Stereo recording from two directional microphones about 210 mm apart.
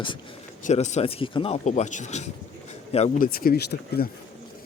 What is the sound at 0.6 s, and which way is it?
Speech, 35° left (ahead or behind).